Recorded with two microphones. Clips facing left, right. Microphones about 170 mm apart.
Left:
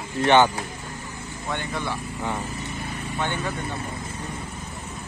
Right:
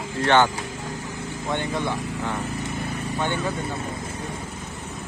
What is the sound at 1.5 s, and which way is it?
Speech, 20° right (ahead or behind).